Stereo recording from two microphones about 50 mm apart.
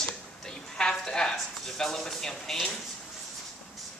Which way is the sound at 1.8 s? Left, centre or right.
Centre.